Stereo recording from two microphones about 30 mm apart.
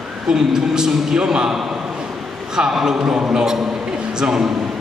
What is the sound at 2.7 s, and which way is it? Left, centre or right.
A man's voice, centre.